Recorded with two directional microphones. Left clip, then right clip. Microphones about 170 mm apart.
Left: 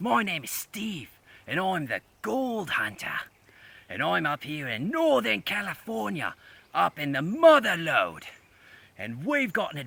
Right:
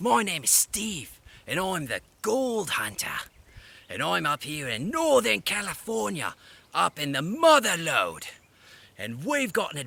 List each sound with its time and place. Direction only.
0.0 s speech: 40° right (ahead or behind)